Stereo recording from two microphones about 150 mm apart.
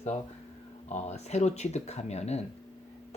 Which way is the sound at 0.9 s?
50° left (ahead or behind).